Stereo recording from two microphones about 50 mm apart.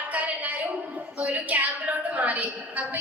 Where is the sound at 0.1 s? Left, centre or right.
Right.